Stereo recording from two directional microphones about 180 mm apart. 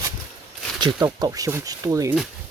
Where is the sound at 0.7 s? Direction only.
25° right (ahead or behind).